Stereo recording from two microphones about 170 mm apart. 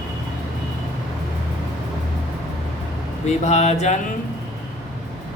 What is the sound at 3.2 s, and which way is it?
Speech, 40° left (ahead or behind).